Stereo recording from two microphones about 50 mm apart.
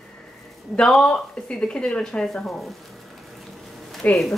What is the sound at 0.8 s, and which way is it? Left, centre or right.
Speech, centre.